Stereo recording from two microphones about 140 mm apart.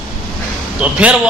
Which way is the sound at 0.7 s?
10° right (ahead or behind).